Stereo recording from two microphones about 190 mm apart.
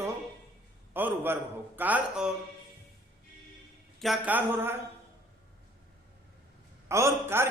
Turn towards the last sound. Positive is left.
turn(degrees=-15)  # may be behind; listen again after turning